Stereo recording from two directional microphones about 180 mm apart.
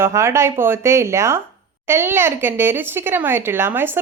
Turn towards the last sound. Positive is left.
turn(degrees=-10)  # may be behind; listen again after turning